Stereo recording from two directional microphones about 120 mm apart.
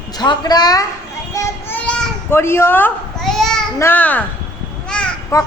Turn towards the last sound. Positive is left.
turn(degrees=25)  # may be behind; listen again after turning